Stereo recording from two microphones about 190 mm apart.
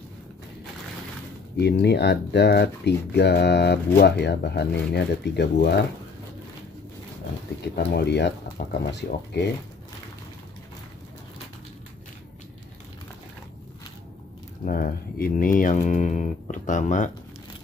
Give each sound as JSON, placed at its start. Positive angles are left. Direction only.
{"t": 1.6, "sound": "speech", "side_deg": 60}
{"t": 7.6, "sound": "speech", "side_deg": 55}
{"t": 14.6, "sound": "speech", "side_deg": 50}